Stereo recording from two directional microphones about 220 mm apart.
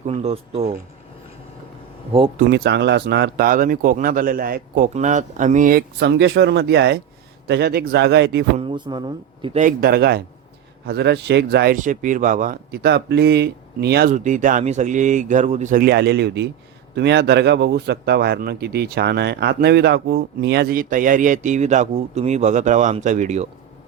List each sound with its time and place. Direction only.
0.0 s a man's voice: 30° right (ahead or behind)
2.5 s speech: 50° right (ahead or behind)
8.5 s a man's voice: 20° right (ahead or behind)